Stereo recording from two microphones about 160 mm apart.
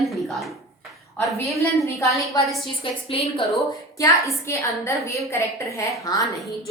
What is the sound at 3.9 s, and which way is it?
A woman's voice, 20° left (ahead or behind).